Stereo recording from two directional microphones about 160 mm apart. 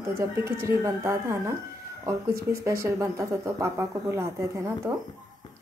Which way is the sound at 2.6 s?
20° right (ahead or behind).